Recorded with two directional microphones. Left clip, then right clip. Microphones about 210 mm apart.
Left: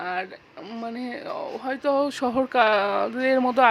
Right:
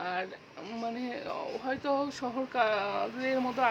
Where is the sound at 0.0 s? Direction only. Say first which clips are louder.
Left 5 dB; 20° left (ahead or behind).